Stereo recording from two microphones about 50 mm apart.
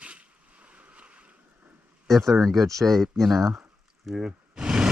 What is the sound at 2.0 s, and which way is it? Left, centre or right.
Speech, centre.